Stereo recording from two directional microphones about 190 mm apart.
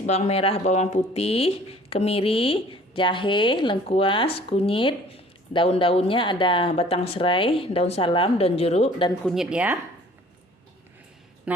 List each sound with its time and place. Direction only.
0.0 s a woman's voice: 35° left (ahead or behind)
9.2 s speech: centre (ahead or behind)
11.5 s speech: 5° right (ahead or behind)